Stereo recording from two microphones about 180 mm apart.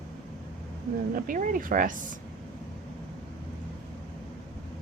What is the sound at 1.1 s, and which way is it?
Speech, 50° right (ahead or behind).